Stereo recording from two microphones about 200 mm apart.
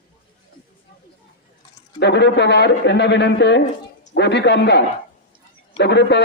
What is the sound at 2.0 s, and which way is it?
A man's voice, 55° left (ahead or behind).